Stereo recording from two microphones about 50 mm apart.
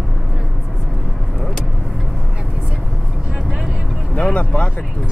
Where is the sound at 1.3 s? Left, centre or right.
Centre.